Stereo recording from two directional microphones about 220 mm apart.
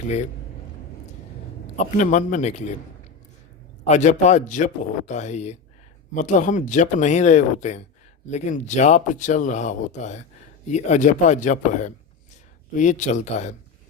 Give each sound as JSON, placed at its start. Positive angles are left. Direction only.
{"t": 1.7, "sound": "speech", "side_deg": 35}
{"t": 3.8, "sound": "speech", "side_deg": 35}